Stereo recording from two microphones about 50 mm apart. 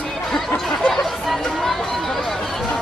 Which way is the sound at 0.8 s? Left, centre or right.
Centre.